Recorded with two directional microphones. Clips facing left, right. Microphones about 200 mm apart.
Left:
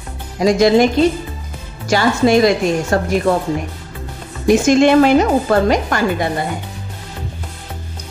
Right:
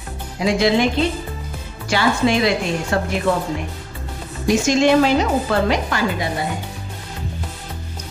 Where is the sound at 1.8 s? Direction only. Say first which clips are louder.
Left 4 dB; 40° left (ahead or behind).